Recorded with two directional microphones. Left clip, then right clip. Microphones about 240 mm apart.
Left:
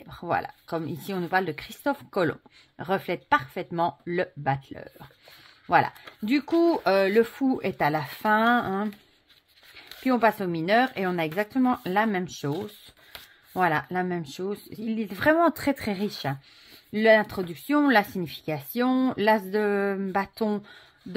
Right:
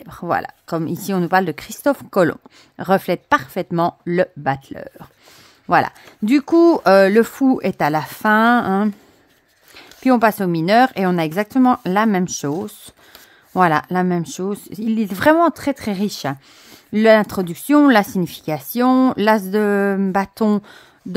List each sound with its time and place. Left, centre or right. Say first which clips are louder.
0.0 s speech: right 7 dB; right
15.3 s speech: right 6 dB; right